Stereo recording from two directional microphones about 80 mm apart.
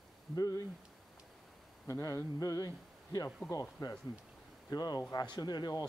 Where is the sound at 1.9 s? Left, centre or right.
Left.